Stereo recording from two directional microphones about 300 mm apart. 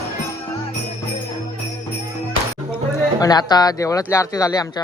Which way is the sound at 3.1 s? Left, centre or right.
Centre.